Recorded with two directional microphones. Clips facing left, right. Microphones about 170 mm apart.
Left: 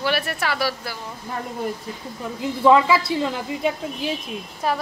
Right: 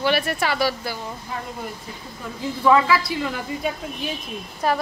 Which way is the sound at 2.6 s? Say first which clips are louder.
Left 2 dB; 20° left (ahead or behind).